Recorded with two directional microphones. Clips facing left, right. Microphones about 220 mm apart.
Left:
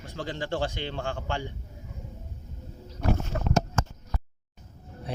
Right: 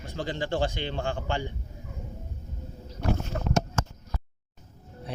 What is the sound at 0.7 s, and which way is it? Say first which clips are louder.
Speech: right 2 dB; centre (ahead or behind).